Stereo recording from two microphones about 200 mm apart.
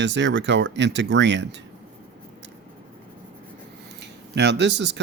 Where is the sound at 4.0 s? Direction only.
60° right (ahead or behind).